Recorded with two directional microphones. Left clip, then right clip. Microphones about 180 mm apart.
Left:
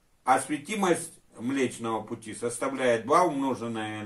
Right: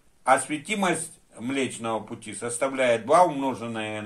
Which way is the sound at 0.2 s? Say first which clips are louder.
Right 3 dB; 30° right (ahead or behind).